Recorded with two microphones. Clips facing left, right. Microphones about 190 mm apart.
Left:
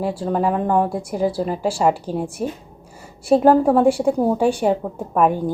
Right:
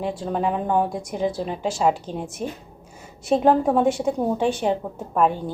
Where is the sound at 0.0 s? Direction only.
5° left (ahead or behind).